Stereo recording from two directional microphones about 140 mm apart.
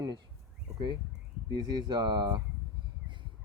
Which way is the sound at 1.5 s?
30° right (ahead or behind).